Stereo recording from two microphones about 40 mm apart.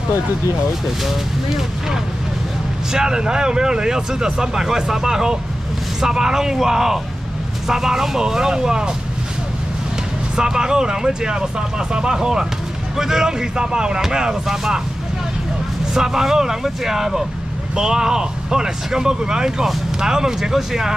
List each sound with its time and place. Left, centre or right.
1.0 s speech: centre
2.9 s speech: centre
10.3 s speech: centre
15.9 s speech: centre